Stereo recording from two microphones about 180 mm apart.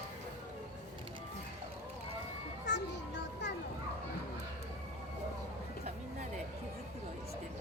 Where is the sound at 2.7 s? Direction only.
75° left (ahead or behind).